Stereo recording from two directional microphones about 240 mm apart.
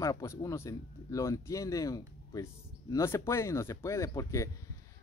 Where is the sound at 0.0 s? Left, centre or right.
Centre.